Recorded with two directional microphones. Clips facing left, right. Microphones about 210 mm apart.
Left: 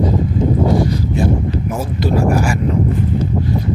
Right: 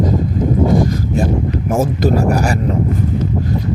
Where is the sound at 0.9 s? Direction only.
45° right (ahead or behind).